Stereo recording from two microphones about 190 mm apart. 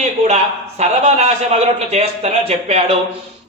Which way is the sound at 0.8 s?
35° right (ahead or behind).